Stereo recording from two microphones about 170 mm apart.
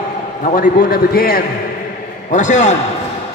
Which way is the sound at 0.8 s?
65° left (ahead or behind).